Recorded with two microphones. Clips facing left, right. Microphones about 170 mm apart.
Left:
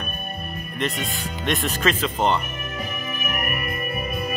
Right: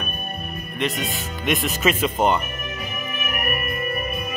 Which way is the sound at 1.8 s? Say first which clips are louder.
Right 3 dB; 10° right (ahead or behind).